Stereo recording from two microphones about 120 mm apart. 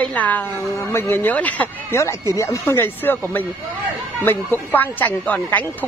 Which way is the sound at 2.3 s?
25° left (ahead or behind).